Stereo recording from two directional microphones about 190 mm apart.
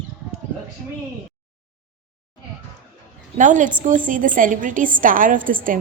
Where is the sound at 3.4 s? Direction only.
40° right (ahead or behind).